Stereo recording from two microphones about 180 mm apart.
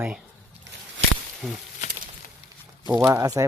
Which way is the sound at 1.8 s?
40° left (ahead or behind).